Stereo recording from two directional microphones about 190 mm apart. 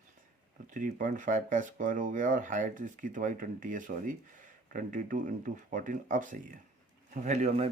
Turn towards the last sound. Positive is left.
turn(degrees=-35)  # may be behind; listen again after turning